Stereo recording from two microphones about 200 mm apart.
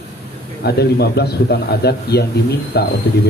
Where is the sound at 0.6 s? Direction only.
55° left (ahead or behind).